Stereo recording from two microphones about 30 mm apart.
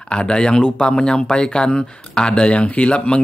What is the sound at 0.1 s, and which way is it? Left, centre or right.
Speech, left.